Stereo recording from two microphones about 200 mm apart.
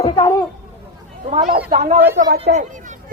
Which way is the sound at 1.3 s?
35° right (ahead or behind).